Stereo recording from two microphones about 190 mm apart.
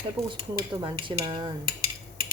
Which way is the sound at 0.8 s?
25° right (ahead or behind).